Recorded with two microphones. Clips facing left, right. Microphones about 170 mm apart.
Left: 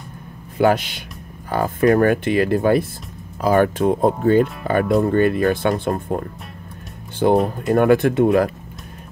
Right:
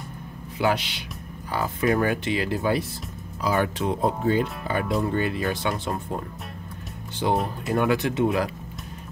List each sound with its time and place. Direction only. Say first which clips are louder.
0.6 s speech: left 7 dB; 50° left (ahead or behind)